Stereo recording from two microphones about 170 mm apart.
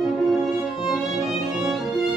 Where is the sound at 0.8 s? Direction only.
Centre (ahead or behind).